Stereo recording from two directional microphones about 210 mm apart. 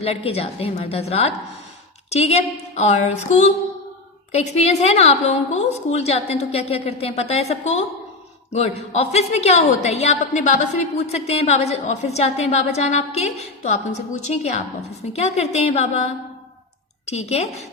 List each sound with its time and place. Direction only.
0.0 s a woman's voice: 30° left (ahead or behind)